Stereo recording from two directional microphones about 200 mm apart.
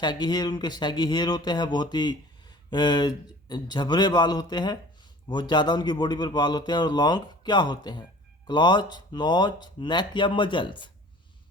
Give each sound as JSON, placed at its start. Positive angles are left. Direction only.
{"t": 0.0, "sound": "speech", "side_deg": 20}